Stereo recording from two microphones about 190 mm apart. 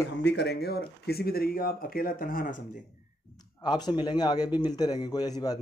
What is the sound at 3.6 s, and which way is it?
A man's voice, 20° left (ahead or behind).